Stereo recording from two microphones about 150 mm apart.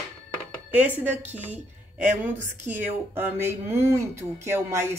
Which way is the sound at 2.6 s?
15° right (ahead or behind).